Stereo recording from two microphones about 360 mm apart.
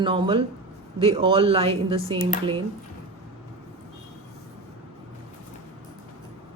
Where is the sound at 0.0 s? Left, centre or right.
Centre.